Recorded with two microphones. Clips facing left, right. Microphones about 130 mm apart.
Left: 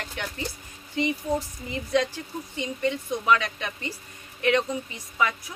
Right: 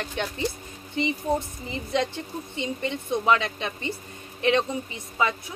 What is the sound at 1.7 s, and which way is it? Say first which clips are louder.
Speech: left 2 dB; 20° right (ahead or behind).